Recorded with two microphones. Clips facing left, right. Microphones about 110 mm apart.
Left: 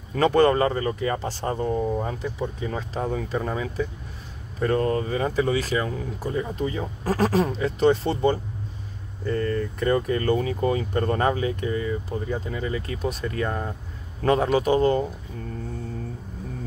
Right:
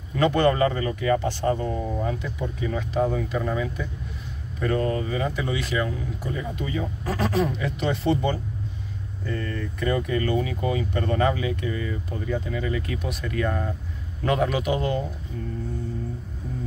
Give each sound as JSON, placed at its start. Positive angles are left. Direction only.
{"t": 0.1, "sound": "speech", "side_deg": 35}